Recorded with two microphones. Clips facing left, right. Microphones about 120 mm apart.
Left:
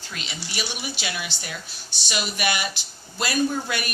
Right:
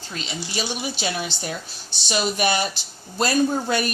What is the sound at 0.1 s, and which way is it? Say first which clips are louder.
Speech: right 5 dB; 30° right (ahead or behind).